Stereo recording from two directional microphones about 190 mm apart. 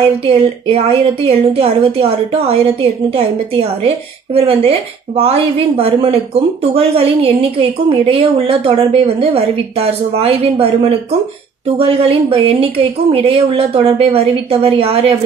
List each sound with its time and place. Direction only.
0.0 s a woman's voice: 30° right (ahead or behind)